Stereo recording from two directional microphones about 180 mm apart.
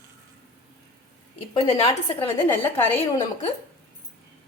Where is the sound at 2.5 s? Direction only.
10° left (ahead or behind).